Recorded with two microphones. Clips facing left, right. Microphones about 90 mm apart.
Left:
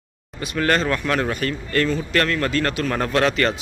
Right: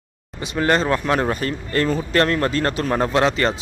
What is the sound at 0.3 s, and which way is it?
Speech, 20° right (ahead or behind).